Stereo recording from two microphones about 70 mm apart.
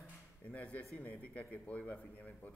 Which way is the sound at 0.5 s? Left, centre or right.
Centre.